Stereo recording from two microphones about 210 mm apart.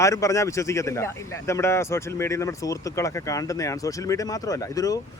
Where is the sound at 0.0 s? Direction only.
15° left (ahead or behind).